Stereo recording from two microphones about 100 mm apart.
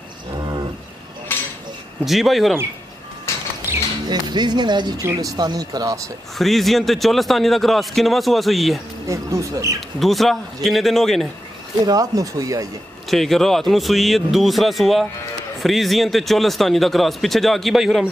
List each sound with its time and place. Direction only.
1.3 s dishes: 20° left (ahead or behind)
2.0 s a man's voice: centre (ahead or behind)
4.1 s speech: 45° right (ahead or behind)
6.3 s a man's voice: centre (ahead or behind)
9.0 s speech: 30° right (ahead or behind)
9.8 s a man's voice: centre (ahead or behind)
11.8 s speech: 40° right (ahead or behind)
13.1 s a man's voice: centre (ahead or behind)